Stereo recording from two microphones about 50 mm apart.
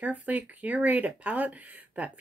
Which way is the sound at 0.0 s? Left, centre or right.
Right.